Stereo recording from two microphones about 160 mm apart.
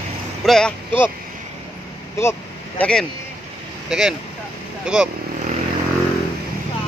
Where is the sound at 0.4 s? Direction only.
5° left (ahead or behind).